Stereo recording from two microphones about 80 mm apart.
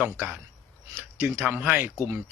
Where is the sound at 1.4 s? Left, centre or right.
Right.